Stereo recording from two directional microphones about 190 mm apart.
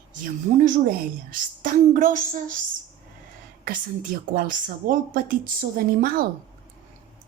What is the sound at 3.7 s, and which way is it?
A woman's voice, 45° right (ahead or behind).